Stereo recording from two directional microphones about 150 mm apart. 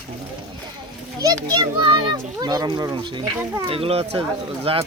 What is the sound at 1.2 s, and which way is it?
A child's voice, 25° right (ahead or behind).